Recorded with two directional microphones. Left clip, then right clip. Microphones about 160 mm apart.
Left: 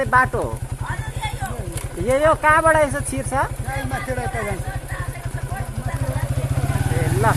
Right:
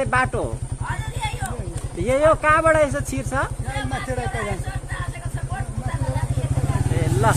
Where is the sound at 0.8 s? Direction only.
45° right (ahead or behind).